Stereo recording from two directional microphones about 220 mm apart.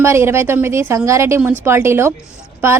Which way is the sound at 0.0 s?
10° right (ahead or behind).